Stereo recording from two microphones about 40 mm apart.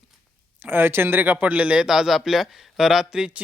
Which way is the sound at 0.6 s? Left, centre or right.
Right.